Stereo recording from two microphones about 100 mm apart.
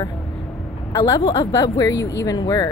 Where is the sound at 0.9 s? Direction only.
35° left (ahead or behind).